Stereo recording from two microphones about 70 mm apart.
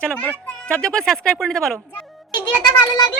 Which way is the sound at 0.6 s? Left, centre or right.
Centre.